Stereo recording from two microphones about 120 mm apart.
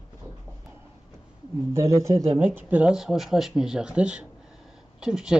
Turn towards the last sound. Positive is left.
turn(degrees=-5)  # may be behind; listen again after turning